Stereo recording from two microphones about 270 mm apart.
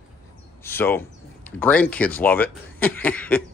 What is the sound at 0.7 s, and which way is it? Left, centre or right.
Speech, centre.